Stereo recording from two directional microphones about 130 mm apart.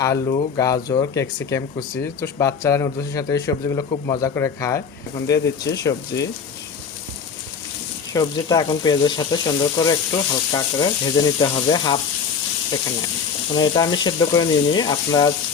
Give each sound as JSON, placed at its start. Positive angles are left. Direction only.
{"t": 0.0, "sound": "speech", "side_deg": 25}
{"t": 8.1, "sound": "speech", "side_deg": 30}
{"t": 13.5, "sound": "speech", "side_deg": 30}